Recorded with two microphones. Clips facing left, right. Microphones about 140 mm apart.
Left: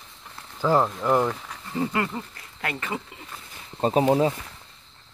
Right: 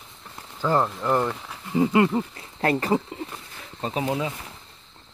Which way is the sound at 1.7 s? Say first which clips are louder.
Right 7 dB; 20° right (ahead or behind).